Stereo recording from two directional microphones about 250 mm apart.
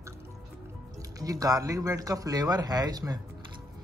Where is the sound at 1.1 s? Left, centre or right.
Centre.